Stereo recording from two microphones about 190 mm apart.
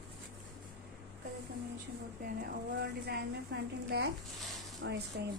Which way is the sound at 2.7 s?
60° right (ahead or behind).